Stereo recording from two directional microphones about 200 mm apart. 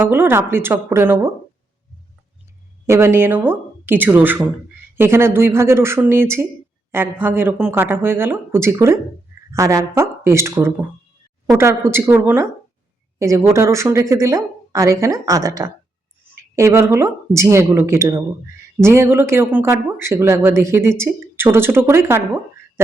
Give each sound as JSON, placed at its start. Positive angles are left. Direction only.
{"t": 0.1, "sound": "a woman's voice", "side_deg": -10}
{"t": 2.8, "sound": "a woman's voice", "side_deg": -15}